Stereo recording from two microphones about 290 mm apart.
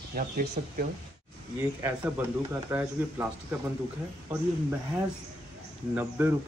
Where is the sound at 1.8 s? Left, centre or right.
Centre.